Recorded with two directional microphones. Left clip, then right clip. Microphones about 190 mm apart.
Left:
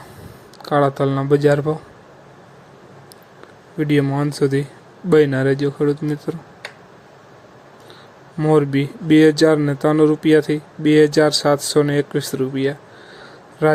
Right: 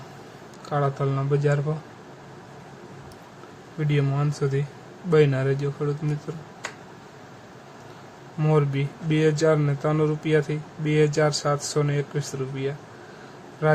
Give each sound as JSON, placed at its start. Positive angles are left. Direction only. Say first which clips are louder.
{"t": 0.6, "sound": "speech", "louder": "left 9 dB", "side_deg": 35}
{"t": 3.8, "sound": "speech", "louder": "left 9 dB", "side_deg": 35}
{"t": 8.4, "sound": "speech", "louder": "left 8 dB", "side_deg": 30}